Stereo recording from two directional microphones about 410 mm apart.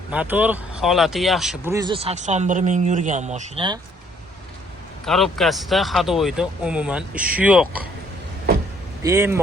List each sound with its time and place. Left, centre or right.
0.1 s speech: centre
5.0 s speech: centre
9.0 s speech: centre